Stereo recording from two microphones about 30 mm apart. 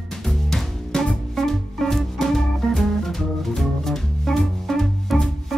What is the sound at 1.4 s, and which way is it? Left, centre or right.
Music, centre.